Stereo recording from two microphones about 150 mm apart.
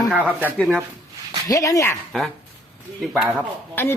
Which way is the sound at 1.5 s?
20° left (ahead or behind).